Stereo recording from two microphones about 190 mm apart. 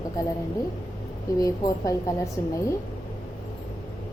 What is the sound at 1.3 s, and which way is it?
A woman's voice, 20° left (ahead or behind).